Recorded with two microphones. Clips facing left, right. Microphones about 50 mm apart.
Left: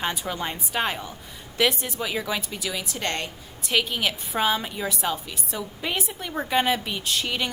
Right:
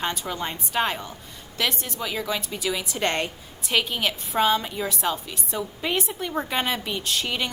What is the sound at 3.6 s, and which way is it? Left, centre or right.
A woman's voice, centre.